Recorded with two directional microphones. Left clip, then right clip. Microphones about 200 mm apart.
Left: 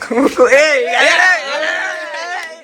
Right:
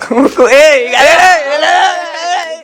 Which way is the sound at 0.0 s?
10° right (ahead or behind).